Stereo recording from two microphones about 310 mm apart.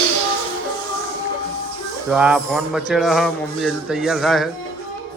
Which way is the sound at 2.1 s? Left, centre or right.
Centre.